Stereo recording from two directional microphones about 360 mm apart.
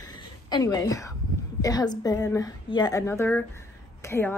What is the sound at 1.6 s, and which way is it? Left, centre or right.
A woman's voice, centre.